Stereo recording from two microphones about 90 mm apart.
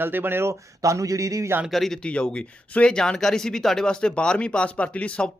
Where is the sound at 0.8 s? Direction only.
40° right (ahead or behind).